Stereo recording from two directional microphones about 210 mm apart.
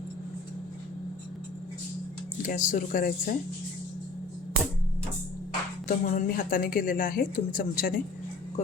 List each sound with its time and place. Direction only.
2.4 s a woman's voice: 40° left (ahead or behind)
5.9 s a woman's voice: 40° left (ahead or behind)